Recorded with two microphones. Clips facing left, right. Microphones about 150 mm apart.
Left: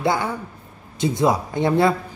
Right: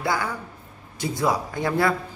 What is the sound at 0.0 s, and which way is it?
Speech, 25° left (ahead or behind).